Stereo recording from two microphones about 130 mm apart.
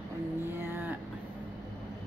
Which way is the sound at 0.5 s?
20° right (ahead or behind).